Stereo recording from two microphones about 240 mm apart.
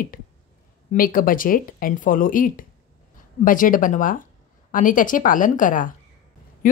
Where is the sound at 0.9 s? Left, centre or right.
Left.